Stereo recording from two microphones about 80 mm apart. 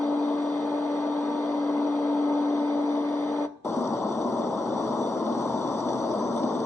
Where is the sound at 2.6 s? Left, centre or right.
Left.